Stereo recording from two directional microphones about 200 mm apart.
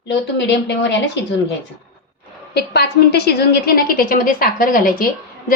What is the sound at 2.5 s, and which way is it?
A woman's voice, 55° left (ahead or behind).